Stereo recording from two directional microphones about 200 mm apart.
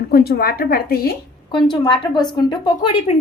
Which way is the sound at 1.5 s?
20° left (ahead or behind).